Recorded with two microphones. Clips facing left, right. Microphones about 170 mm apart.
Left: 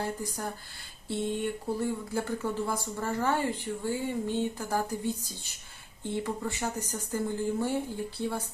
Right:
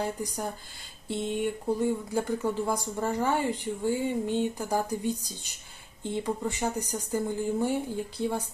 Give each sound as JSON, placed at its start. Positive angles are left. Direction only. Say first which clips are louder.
{"t": 0.0, "sound": "speech", "louder": "right 2 dB", "side_deg": -15}